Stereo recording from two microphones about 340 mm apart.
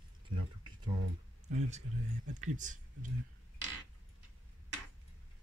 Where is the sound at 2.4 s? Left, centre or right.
Right.